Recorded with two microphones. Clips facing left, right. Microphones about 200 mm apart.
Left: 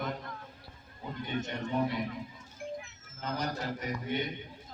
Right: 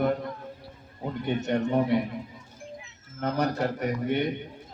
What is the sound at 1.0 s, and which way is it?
Speech, 65° right (ahead or behind).